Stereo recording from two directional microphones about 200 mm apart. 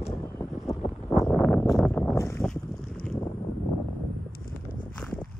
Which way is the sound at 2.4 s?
5° left (ahead or behind).